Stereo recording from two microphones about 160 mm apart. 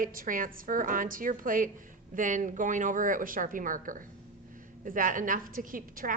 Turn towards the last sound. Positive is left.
turn(degrees=-60)  # may be behind; listen again after turning